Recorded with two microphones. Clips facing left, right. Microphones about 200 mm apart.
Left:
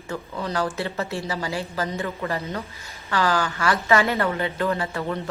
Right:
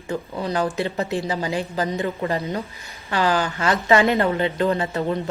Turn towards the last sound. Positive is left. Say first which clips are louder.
# right 4 dB
turn(degrees=-20)  # may be behind; listen again after turning